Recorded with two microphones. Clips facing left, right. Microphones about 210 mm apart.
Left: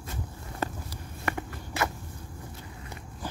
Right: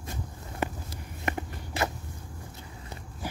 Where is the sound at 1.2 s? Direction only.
20° right (ahead or behind).